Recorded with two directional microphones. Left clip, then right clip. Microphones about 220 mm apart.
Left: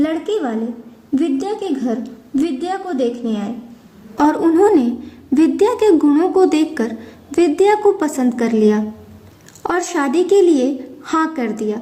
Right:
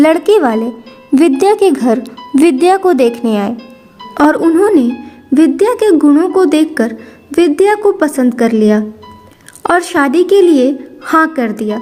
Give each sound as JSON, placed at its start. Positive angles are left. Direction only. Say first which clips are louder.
{"t": 0.0, "sound": "speech", "louder": "right 11 dB", "side_deg": -45}
{"t": 4.2, "sound": "a woman's voice", "louder": "right 4 dB", "side_deg": -20}